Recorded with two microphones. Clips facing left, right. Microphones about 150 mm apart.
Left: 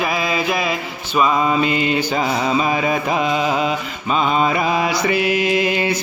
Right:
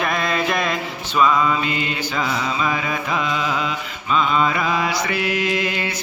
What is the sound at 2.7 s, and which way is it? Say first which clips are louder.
Music: left 5 dB; 25° left (ahead or behind).